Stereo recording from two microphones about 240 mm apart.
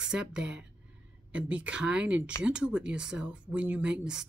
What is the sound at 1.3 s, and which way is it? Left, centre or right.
Speech, centre.